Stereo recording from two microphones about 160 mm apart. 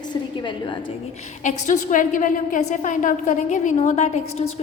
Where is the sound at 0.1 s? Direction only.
30° left (ahead or behind).